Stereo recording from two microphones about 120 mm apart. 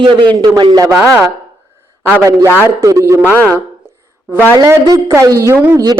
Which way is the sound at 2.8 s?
25° right (ahead or behind).